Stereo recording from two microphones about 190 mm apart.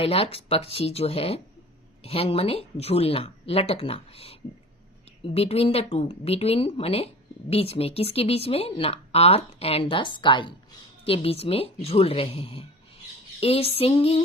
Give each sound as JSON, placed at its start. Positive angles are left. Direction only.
{"t": 0.0, "sound": "speech", "side_deg": 30}